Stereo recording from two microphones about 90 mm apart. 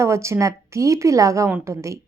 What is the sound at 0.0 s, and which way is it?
A woman's voice, 35° right (ahead or behind).